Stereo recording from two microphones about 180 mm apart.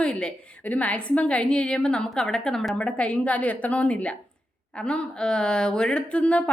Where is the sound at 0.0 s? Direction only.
5° left (ahead or behind).